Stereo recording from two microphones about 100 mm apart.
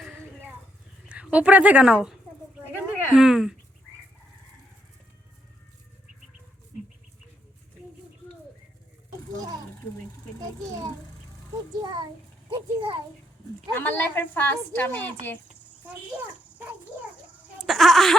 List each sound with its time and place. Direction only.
1.0 s speech: 10° right (ahead or behind)
2.7 s a sound: 5° right (ahead or behind)
12.5 s a child's voice: 55° right (ahead or behind)
13.7 s a woman's voice: 20° left (ahead or behind)
17.6 s speech: centre (ahead or behind)